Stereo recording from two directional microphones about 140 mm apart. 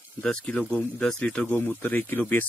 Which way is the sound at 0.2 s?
5° left (ahead or behind).